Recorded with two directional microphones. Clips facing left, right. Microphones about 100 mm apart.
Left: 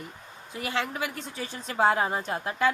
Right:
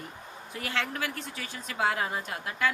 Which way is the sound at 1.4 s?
30° left (ahead or behind).